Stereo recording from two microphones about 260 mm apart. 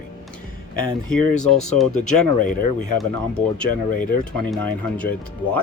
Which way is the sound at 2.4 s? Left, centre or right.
Left.